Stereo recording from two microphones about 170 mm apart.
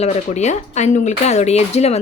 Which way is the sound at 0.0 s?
40° left (ahead or behind).